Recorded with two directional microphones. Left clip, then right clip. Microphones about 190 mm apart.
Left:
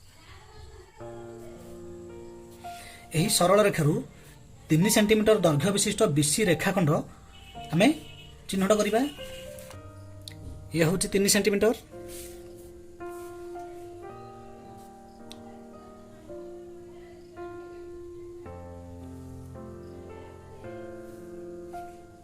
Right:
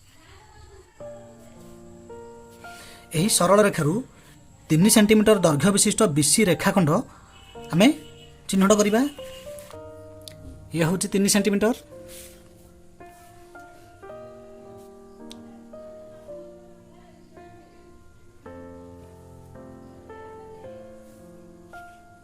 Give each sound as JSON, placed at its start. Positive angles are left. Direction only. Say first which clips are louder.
{"t": 3.1, "sound": "speech", "louder": "right 3 dB", "side_deg": -35}
{"t": 10.2, "sound": "speech", "louder": "right 2 dB", "side_deg": -30}